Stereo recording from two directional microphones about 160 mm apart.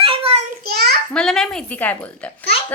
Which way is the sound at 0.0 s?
35° right (ahead or behind).